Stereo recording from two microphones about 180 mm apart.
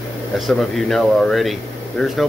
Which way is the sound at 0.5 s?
Centre (ahead or behind).